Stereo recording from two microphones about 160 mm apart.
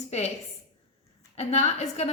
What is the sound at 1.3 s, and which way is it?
Speech, 40° left (ahead or behind).